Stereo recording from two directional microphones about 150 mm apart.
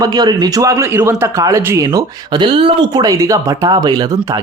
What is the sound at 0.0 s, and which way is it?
Speech, 25° right (ahead or behind).